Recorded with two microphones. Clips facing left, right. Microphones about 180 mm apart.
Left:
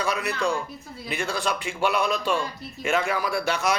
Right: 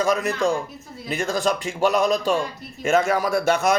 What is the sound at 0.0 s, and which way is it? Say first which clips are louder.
Speech: right 5 dB; 45° right (ahead or behind).